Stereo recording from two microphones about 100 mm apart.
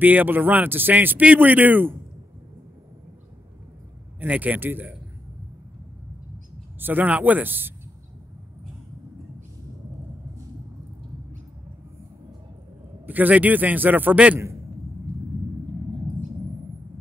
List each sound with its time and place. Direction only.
0.0 s a man's voice: 15° right (ahead or behind)
4.2 s a man's voice: 15° right (ahead or behind)
6.8 s speech: 20° right (ahead or behind)
13.0 s a man's voice: 15° right (ahead or behind)